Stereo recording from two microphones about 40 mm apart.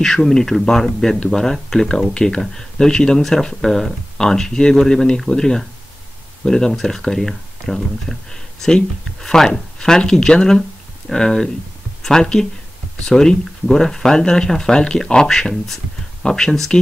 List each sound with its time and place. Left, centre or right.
0.0 s speech: centre